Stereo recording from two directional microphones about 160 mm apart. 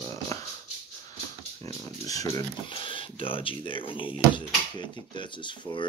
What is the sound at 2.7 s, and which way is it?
Speech, 35° left (ahead or behind).